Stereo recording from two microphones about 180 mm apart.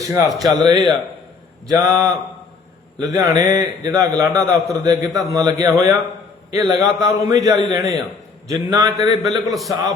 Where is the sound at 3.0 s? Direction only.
20° right (ahead or behind).